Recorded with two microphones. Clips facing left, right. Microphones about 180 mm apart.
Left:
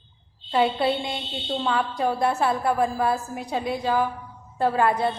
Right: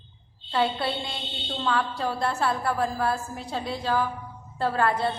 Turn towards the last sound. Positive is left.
turn(degrees=15)  # may be behind; listen again after turning